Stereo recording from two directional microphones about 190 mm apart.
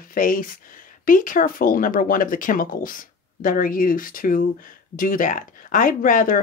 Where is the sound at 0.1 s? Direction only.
45° left (ahead or behind).